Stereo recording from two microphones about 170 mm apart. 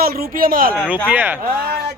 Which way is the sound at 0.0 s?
60° right (ahead or behind).